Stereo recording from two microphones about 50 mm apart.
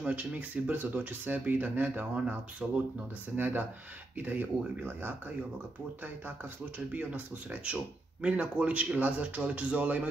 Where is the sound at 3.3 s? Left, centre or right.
Right.